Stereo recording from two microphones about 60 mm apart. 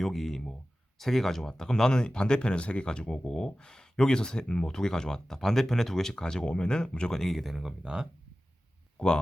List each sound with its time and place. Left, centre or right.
0.0 s speech: centre
7.2 s speech: centre
7.8 s speech: centre
9.0 s speech: centre